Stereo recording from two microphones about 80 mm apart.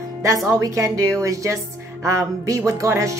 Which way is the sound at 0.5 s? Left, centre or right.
Right.